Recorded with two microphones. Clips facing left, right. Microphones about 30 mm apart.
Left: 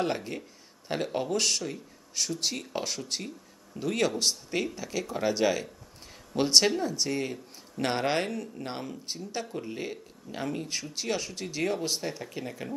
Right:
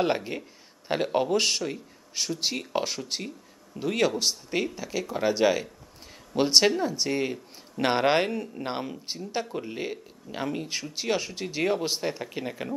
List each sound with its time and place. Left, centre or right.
0.0 s a man's voice: right